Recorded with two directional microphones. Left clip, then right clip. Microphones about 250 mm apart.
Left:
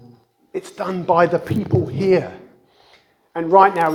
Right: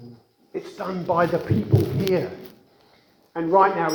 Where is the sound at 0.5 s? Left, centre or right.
Left.